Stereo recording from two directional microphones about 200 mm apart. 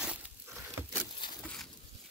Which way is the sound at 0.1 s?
10° right (ahead or behind).